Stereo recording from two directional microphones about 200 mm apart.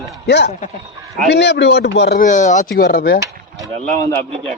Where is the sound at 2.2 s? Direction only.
40° left (ahead or behind).